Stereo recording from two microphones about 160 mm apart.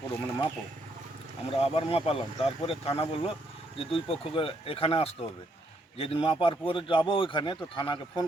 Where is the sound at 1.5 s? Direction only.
35° left (ahead or behind).